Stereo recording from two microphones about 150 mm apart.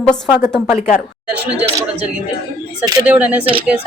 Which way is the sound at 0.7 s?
55° left (ahead or behind).